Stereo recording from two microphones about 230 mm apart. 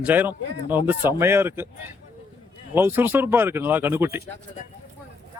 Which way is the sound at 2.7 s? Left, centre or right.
Centre.